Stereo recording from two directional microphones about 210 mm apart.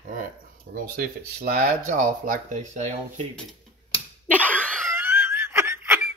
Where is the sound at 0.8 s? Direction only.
45° right (ahead or behind).